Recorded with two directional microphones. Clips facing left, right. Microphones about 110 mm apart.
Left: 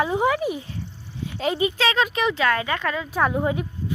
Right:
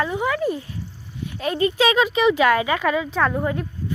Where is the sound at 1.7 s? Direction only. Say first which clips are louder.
Right 4 dB; 10° right (ahead or behind).